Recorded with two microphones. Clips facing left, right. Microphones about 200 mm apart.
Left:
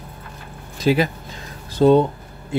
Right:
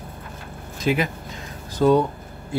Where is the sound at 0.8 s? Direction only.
35° left (ahead or behind).